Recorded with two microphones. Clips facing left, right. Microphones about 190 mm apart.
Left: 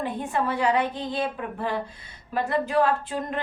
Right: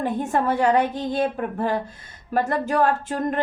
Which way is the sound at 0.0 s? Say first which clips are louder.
Right 4 dB; 45° right (ahead or behind).